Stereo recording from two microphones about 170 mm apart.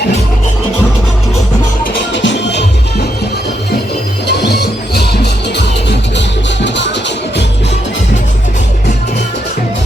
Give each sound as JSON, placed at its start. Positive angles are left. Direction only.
{"t": 2.1, "sound": "music", "side_deg": 90}
{"t": 4.3, "sound": "music", "side_deg": 80}